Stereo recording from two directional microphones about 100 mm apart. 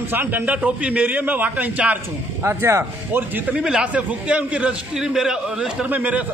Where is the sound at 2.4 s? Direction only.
25° right (ahead or behind).